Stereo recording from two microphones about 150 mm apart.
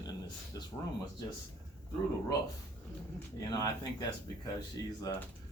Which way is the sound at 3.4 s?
25° left (ahead or behind).